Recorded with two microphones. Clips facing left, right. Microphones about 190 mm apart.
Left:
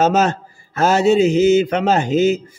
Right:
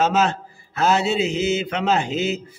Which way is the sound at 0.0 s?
45° left (ahead or behind).